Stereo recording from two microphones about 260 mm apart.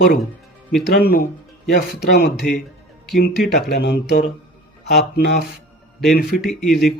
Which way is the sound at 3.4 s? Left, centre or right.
Left.